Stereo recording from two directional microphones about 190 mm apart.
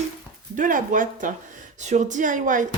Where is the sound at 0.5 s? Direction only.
45° right (ahead or behind).